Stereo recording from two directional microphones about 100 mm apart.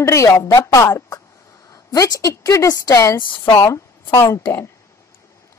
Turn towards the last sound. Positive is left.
turn(degrees=25)  # may be behind; listen again after turning